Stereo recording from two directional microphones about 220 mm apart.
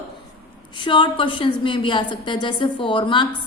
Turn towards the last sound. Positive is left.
turn(degrees=20)  # may be behind; listen again after turning